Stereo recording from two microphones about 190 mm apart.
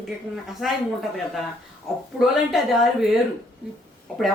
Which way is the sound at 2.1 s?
Centre (ahead or behind).